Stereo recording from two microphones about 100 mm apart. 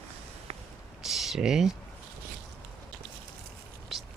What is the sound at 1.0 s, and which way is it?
Speech, 5° right (ahead or behind).